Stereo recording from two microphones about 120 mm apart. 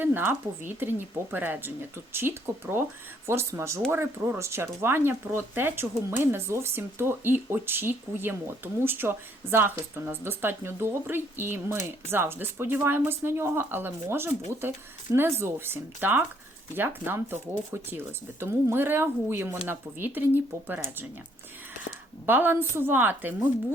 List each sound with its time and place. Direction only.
0.0 s a woman's voice: 15° right (ahead or behind)
22.3 s a woman's voice: 15° right (ahead or behind)